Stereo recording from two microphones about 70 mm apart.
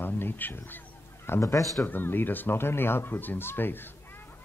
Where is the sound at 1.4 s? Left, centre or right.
Left.